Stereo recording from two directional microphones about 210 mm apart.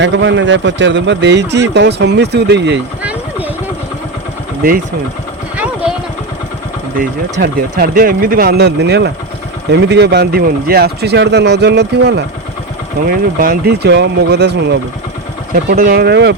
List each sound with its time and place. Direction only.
0.0 s speech: 60° right (ahead or behind)
3.0 s boat: 5° right (ahead or behind)
7.3 s speech: 50° right (ahead or behind)